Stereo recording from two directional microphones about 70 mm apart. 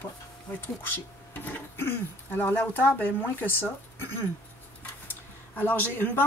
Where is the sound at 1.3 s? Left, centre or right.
Left.